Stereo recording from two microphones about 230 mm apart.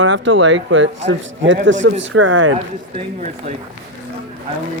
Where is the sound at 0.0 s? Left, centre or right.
Right.